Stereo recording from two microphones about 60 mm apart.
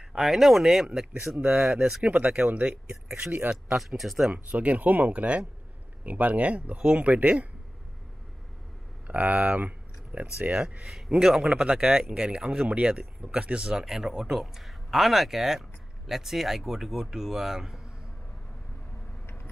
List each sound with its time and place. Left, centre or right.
0.1 s speech: centre
1.4 s speech: right
1.7 s speech: centre
2.0 s speech: right
3.7 s speech: centre
4.3 s speech: right
9.0 s speech: right
11.1 s speech: centre
19.2 s vehicle: left